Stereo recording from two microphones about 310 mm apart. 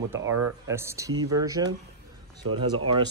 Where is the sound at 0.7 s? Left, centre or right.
Centre.